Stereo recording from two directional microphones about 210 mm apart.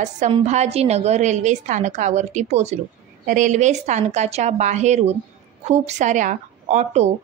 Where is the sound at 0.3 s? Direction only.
30° right (ahead or behind).